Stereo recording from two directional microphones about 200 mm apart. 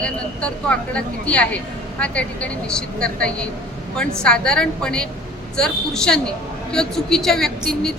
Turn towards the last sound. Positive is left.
turn(degrees=0)  # may be behind; listen again after turning